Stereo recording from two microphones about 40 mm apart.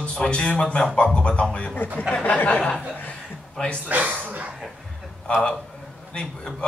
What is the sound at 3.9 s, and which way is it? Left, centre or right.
Speech, right.